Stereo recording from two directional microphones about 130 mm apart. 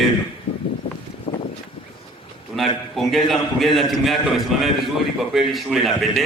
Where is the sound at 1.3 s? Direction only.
45° left (ahead or behind).